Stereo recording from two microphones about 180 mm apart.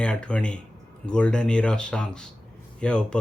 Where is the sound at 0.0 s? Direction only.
5° left (ahead or behind).